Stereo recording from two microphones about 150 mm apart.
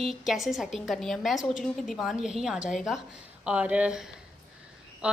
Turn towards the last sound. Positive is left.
turn(degrees=-5)  # may be behind; listen again after turning